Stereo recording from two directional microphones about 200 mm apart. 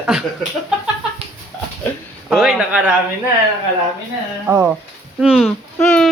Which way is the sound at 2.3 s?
Centre (ahead or behind).